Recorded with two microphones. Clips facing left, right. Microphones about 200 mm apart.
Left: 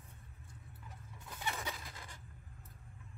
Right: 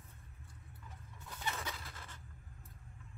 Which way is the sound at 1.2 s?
15° left (ahead or behind).